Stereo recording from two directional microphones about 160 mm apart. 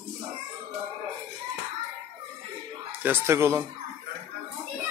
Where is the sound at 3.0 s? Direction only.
15° right (ahead or behind).